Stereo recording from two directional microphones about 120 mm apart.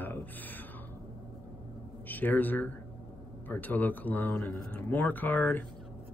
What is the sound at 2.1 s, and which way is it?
Speech, 15° left (ahead or behind).